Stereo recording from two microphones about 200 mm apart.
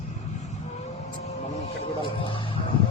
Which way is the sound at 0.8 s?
30° left (ahead or behind).